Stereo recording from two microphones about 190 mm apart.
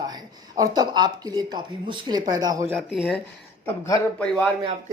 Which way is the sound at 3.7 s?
15° left (ahead or behind).